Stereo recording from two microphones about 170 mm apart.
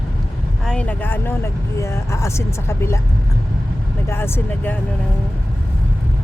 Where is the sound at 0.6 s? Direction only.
5° left (ahead or behind).